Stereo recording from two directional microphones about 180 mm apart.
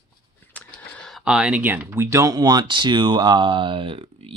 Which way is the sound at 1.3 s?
5° right (ahead or behind).